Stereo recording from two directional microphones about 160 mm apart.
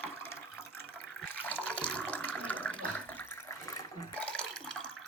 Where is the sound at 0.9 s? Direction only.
10° left (ahead or behind).